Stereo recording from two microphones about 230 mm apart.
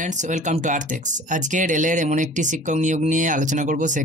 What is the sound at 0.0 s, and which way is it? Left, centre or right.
Speech, right.